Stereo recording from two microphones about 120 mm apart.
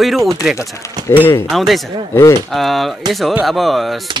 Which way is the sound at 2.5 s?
Centre (ahead or behind).